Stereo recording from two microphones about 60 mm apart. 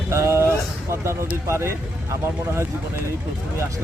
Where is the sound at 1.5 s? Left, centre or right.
Right.